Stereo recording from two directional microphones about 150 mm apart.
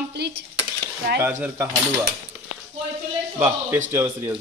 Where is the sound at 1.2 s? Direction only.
15° right (ahead or behind).